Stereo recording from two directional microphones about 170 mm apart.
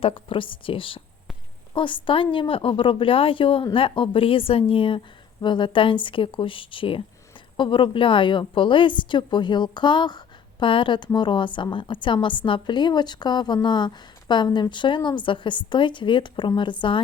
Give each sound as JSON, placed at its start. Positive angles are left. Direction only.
{"t": 0.0, "sound": "a woman's voice", "side_deg": 30}